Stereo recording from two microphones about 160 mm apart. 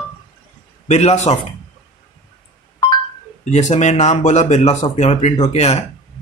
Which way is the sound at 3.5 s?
45° left (ahead or behind).